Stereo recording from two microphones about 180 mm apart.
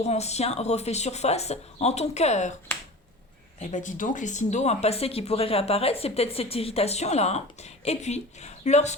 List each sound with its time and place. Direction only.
0.0 s speech: 35° left (ahead or behind)
3.6 s speech: 45° left (ahead or behind)